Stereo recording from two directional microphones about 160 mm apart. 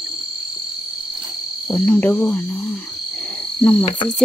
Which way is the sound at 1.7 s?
10° left (ahead or behind).